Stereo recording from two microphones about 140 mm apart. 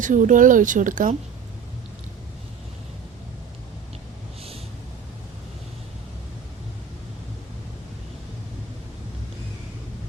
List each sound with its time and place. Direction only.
0.0 s speech: 65° right (ahead or behind)